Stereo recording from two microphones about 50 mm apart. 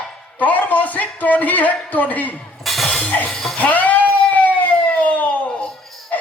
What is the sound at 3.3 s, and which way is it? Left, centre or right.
Music, centre.